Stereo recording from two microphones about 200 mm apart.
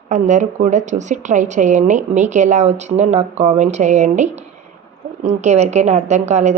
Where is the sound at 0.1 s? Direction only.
35° right (ahead or behind).